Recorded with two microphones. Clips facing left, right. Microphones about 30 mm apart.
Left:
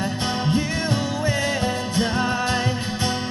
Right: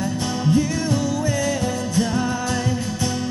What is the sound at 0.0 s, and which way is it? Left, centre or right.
Music, left.